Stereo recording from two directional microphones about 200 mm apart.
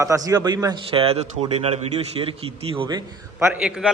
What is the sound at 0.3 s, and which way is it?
Speech, 20° right (ahead or behind).